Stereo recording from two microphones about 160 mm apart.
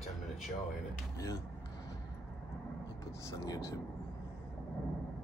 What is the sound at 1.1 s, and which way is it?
Speech, 20° left (ahead or behind).